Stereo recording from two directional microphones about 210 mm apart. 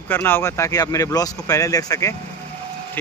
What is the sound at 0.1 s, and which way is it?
Speech, 10° left (ahead or behind).